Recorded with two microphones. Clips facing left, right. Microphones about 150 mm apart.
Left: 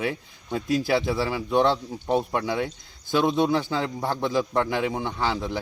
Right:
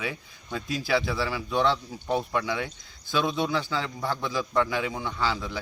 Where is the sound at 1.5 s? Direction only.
55° left (ahead or behind).